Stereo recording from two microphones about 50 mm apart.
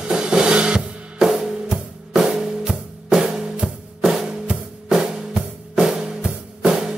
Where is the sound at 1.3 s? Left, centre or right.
Centre.